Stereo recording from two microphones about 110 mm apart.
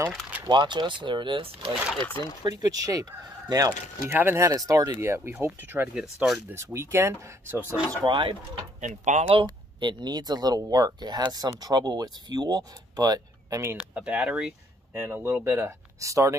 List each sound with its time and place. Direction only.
0.5 s speech: 45° right (ahead or behind)
2.4 s speech: 35° right (ahead or behind)
4.1 s speech: 20° right (ahead or behind)
4.5 s speech: 35° right (ahead or behind)
5.9 s speech: centre (ahead or behind)
6.5 s speech: 25° right (ahead or behind)
8.0 s speech: 45° right (ahead or behind)
8.8 s speech: 90° right
9.3 s speech: 50° right (ahead or behind)
13.7 s speech: 10° right (ahead or behind)
15.0 s speech: 20° right (ahead or behind)